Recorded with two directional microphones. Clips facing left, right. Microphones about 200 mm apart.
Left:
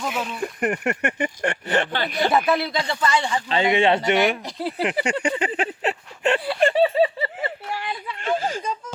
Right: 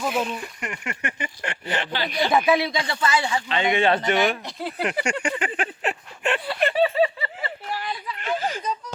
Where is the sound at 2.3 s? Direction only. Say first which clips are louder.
Right 1 dB; centre (ahead or behind).